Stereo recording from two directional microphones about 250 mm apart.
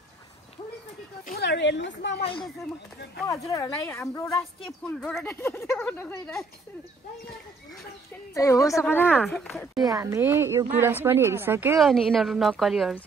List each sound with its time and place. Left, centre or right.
1.2 s speech: left
3.3 s a woman's voice: centre
8.4 s a woman's voice: centre
9.8 s a woman's voice: centre